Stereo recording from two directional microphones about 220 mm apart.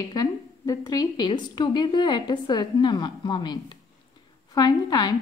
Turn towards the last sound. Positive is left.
turn(degrees=20)  # may be behind; listen again after turning